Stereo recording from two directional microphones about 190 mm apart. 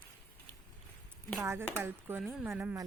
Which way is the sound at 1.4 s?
10° right (ahead or behind).